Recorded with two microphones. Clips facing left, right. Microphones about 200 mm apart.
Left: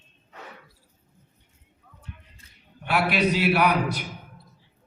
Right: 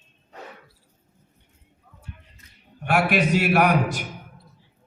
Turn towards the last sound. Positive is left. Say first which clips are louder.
# right 3 dB
turn(degrees=-50)  # may be behind; listen again after turning